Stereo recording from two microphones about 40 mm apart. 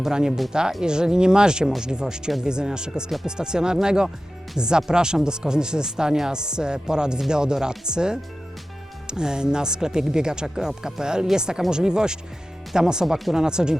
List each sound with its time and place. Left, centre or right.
0.0 s speech: centre